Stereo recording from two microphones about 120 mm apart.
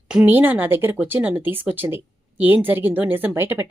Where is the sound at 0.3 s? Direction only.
15° right (ahead or behind).